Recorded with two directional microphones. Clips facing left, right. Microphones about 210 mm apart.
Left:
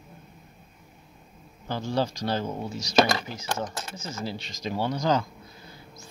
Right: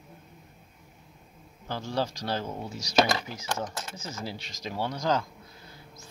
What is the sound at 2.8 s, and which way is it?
Speech, 10° right (ahead or behind).